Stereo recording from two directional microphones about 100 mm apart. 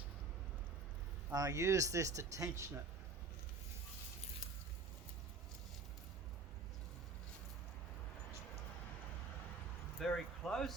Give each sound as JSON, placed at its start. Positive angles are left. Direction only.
{"t": 1.3, "sound": "speech", "side_deg": -35}
{"t": 10.0, "sound": "speech", "side_deg": 5}